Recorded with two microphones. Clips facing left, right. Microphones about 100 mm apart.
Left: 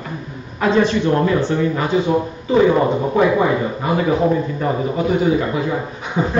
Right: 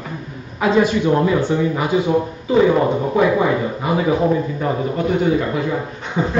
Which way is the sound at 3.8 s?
10° right (ahead or behind).